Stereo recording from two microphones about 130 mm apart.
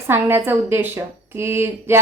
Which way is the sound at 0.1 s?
15° right (ahead or behind).